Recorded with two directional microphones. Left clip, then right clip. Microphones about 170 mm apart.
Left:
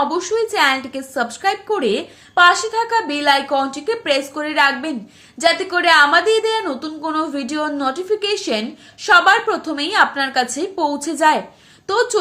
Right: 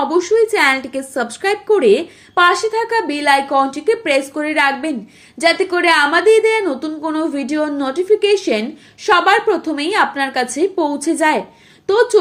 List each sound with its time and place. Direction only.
0.1 s a woman's voice: 15° right (ahead or behind)